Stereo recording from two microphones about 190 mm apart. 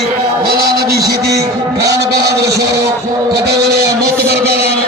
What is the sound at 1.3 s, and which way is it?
Music, 15° right (ahead or behind).